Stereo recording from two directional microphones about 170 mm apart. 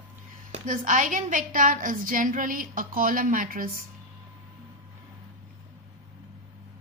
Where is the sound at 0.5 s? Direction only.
50° right (ahead or behind).